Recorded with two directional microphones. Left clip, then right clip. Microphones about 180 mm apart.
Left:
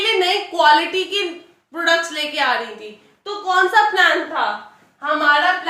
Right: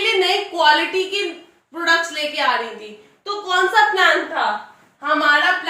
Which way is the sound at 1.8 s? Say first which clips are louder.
Even; 25° left (ahead or behind).